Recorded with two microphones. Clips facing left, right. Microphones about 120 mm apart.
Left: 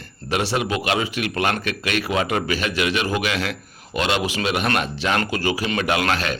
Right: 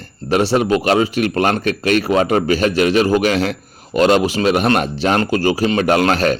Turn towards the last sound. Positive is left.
turn(degrees=-40)  # may be behind; listen again after turning